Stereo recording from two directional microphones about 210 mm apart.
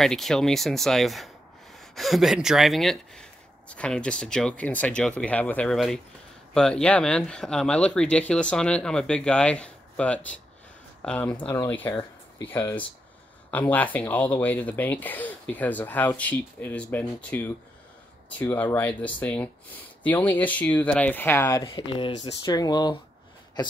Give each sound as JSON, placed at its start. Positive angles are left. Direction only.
{"t": 0.0, "sound": "speech", "side_deg": 0}
{"t": 13.5, "sound": "speech", "side_deg": 10}
{"t": 21.6, "sound": "speech", "side_deg": 25}